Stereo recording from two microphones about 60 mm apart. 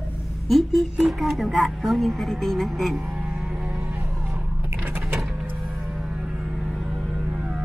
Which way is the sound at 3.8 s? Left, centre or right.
Right.